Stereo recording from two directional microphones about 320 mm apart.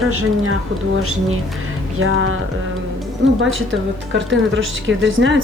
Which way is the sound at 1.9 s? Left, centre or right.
Right.